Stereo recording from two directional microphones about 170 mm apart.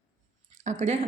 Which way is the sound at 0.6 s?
40° right (ahead or behind).